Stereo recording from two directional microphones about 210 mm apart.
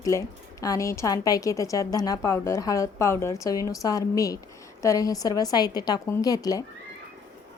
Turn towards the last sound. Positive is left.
turn(degrees=15)  # may be behind; listen again after turning